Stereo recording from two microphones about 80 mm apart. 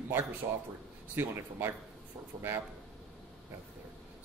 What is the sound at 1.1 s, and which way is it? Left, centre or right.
Speech, right.